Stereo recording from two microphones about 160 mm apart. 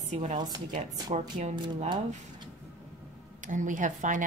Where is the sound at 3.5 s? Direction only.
55° right (ahead or behind).